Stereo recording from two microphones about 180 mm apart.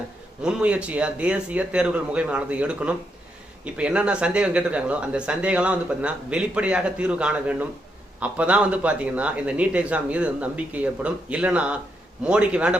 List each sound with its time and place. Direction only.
0.4 s a man's voice: 5° right (ahead or behind)